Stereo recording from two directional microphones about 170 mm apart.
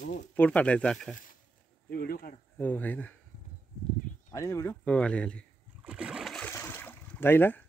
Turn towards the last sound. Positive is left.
turn(degrees=10)  # may be behind; listen again after turning